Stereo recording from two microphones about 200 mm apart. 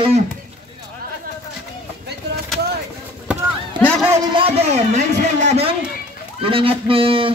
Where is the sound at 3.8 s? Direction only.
5° left (ahead or behind).